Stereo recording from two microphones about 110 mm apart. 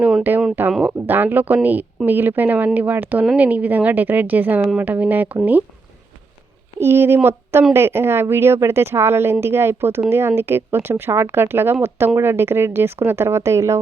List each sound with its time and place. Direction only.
0.0 s a woman's voice: 15° right (ahead or behind)
6.7 s speech: 20° right (ahead or behind)